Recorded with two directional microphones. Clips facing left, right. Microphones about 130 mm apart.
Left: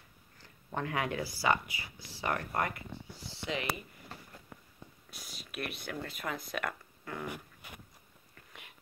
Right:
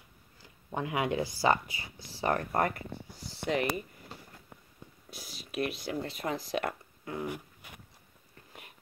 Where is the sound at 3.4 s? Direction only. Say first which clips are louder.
Right 7 dB; 50° right (ahead or behind).